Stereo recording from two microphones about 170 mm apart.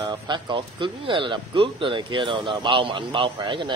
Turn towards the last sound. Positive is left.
turn(degrees=-30)  # may be behind; listen again after turning